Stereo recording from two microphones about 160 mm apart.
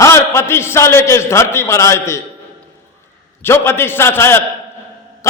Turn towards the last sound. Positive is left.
turn(degrees=15)  # may be behind; listen again after turning